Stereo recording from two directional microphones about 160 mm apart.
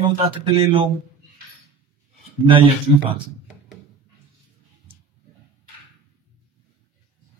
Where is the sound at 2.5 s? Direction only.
35° right (ahead or behind).